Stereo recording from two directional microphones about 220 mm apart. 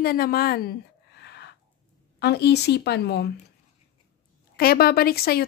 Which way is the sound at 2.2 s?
50° left (ahead or behind).